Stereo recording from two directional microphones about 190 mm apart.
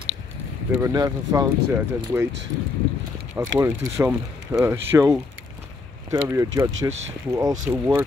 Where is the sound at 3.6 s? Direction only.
15° right (ahead or behind).